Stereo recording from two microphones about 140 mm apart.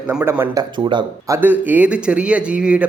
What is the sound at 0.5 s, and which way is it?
Speech, 35° right (ahead or behind).